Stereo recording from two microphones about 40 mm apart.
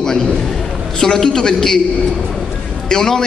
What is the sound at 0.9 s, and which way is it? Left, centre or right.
Speech, centre.